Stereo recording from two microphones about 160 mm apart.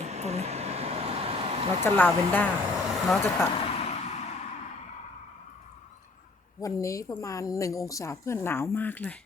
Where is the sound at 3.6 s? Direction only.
40° left (ahead or behind).